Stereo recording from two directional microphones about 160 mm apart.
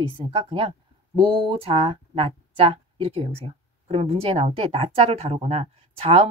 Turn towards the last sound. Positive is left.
turn(degrees=-35)  # may be behind; listen again after turning